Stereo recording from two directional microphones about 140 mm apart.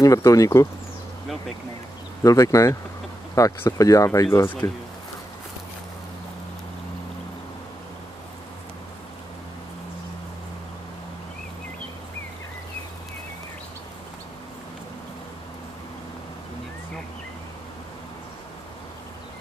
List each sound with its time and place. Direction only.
0.0 s speech: 25° left (ahead or behind)
2.2 s speech: 25° left (ahead or behind)